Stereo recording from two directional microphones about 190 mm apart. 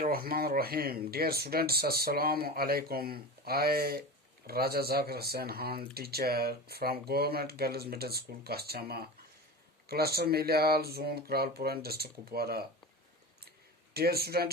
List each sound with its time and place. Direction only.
0.0 s speech: 50° right (ahead or behind)
13.9 s speech: 55° right (ahead or behind)